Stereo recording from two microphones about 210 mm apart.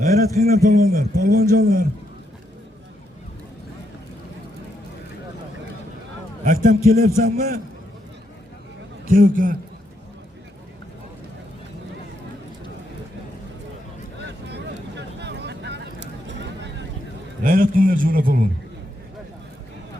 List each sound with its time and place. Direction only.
0.4 s speech: 45° right (ahead or behind)
6.4 s a man's voice: 40° right (ahead or behind)
9.0 s a man's voice: 40° right (ahead or behind)
14.2 s vehicle: 55° right (ahead or behind)
17.4 s speech: 40° right (ahead or behind)